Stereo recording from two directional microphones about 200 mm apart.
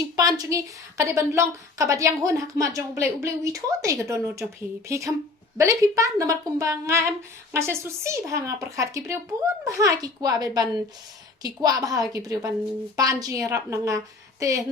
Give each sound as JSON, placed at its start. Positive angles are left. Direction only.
{"t": 0.0, "sound": "speech", "side_deg": -20}